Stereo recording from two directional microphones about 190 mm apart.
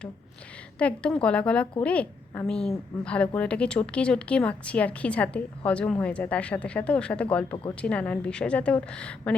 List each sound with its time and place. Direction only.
0.8 s a woman's voice: 5° left (ahead or behind)